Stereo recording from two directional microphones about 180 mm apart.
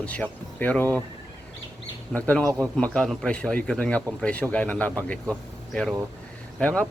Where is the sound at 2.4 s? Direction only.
15° right (ahead or behind).